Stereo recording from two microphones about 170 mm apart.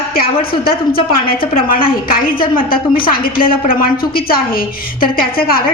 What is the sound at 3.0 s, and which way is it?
Speech, 55° left (ahead or behind).